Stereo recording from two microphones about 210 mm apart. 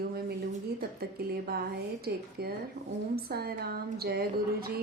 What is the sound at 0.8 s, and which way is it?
A woman's voice, 50° right (ahead or behind).